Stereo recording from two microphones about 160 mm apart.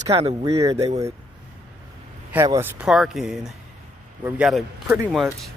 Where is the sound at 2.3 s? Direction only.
15° right (ahead or behind).